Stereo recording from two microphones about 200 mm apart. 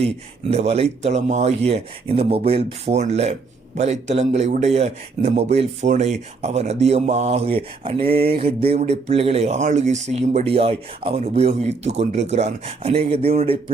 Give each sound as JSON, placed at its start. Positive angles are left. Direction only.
{"t": 0.5, "sound": "speech", "side_deg": -30}